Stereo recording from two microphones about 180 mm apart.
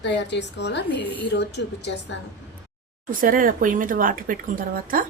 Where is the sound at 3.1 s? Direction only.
50° right (ahead or behind).